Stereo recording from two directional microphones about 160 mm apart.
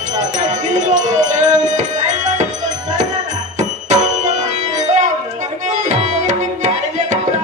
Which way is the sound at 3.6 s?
50° right (ahead or behind).